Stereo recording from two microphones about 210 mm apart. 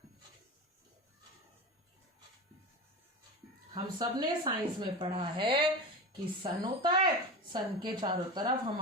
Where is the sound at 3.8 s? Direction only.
20° right (ahead or behind).